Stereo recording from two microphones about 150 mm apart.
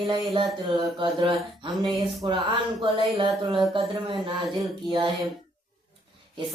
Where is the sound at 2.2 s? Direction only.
35° right (ahead or behind).